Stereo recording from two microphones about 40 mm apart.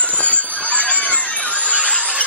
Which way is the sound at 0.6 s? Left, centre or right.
Left.